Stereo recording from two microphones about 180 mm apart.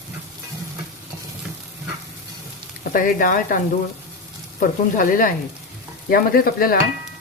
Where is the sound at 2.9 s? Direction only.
50° left (ahead or behind).